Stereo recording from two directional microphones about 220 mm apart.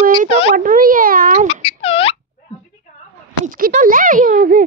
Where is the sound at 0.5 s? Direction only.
40° right (ahead or behind).